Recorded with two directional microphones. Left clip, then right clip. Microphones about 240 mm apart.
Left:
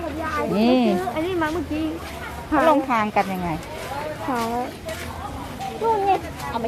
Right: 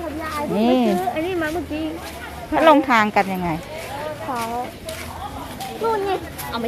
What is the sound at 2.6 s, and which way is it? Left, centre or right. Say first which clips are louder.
Speech: right 5 dB; centre.